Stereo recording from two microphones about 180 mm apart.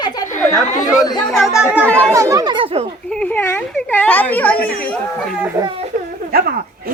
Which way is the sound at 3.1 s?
10° left (ahead or behind).